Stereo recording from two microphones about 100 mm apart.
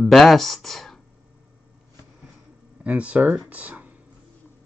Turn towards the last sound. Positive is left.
turn(degrees=-15)  # may be behind; listen again after turning